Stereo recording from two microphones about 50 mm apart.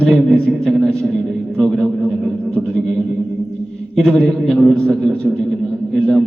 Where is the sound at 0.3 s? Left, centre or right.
Centre.